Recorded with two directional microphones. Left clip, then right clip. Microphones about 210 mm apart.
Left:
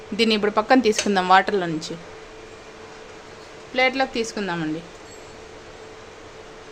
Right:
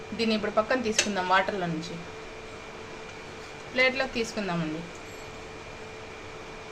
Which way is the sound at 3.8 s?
45° left (ahead or behind).